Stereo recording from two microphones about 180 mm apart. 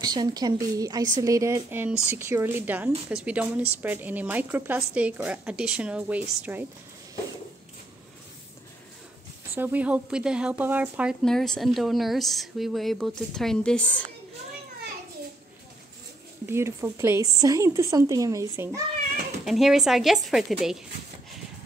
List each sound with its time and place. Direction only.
0.0 s a woman's voice: 20° right (ahead or behind)
9.6 s a woman's voice: 10° right (ahead or behind)
11.2 s speech: 5° left (ahead or behind)
16.4 s a woman's voice: 15° right (ahead or behind)
19.4 s speech: centre (ahead or behind)